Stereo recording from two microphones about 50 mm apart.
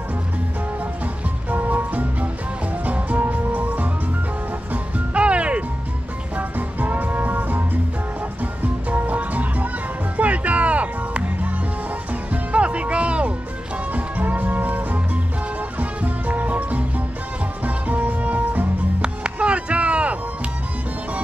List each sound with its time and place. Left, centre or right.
1.5 s music: right
4.9 s music: right
6.3 s music: right
8.9 s music: right
18.9 s music: right